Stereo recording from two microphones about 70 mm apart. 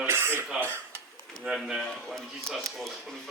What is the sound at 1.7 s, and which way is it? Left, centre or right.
Speech, centre.